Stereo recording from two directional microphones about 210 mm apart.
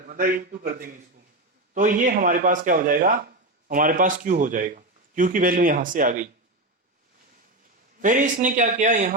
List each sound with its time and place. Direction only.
0.1 s a man's voice: 40° right (ahead or behind)
8.0 s a man's voice: 40° right (ahead or behind)